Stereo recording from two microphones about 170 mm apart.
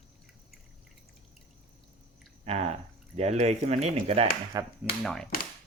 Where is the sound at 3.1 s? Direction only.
40° right (ahead or behind).